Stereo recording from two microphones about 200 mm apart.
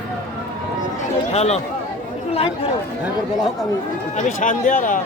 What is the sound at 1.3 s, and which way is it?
Speech, 35° left (ahead or behind).